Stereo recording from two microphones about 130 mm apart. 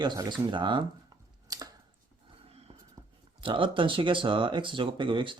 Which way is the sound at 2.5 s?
50° right (ahead or behind).